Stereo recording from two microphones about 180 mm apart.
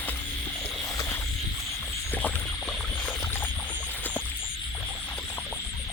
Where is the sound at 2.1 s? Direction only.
10° left (ahead or behind).